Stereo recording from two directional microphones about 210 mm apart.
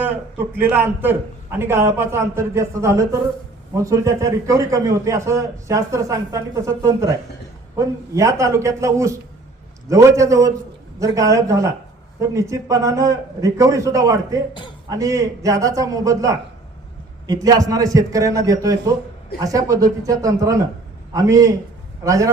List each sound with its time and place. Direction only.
0.0 s a man's voice: 10° right (ahead or behind)